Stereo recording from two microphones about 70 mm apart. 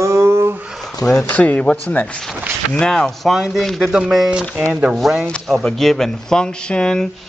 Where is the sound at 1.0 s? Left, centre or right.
Left.